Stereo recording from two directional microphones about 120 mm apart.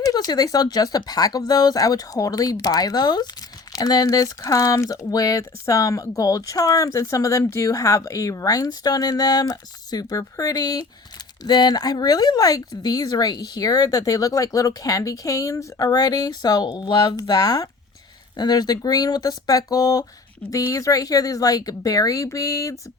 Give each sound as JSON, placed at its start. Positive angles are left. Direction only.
{"t": 0.0, "sound": "speech", "side_deg": 35}